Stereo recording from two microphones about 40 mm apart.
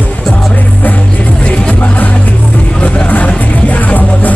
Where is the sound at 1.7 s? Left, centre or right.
Left.